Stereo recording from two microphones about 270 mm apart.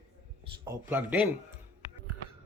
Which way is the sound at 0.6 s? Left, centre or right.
Centre.